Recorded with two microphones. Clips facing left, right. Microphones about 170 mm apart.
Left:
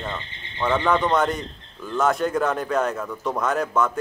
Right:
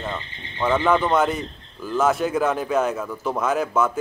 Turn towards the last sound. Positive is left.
turn(degrees=0)  # may be behind; listen again after turning